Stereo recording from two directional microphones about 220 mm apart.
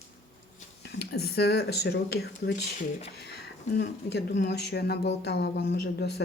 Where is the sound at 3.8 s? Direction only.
50° left (ahead or behind).